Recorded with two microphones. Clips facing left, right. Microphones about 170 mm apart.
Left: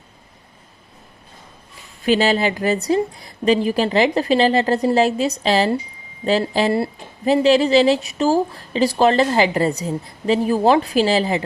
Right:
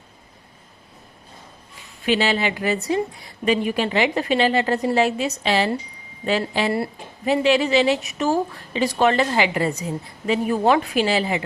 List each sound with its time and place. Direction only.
2.0 s speech: 40° left (ahead or behind)